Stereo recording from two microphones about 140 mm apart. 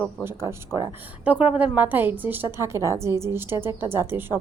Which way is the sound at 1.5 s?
10° right (ahead or behind).